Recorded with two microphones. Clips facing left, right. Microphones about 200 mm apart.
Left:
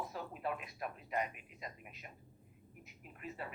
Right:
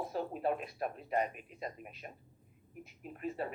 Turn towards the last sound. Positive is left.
turn(degrees=-35)  # may be behind; listen again after turning